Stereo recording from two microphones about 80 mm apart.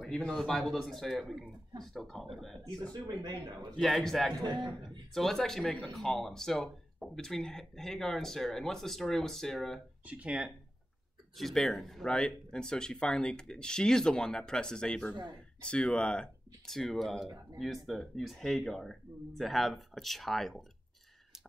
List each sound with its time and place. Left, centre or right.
0.3 s speech: centre
2.9 s speech: right
3.7 s speech: centre
4.5 s a man's voice: right
5.1 s speech: centre
10.0 s speech: centre
11.3 s speech: centre